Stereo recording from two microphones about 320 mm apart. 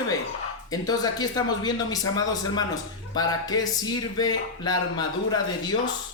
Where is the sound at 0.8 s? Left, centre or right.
Centre.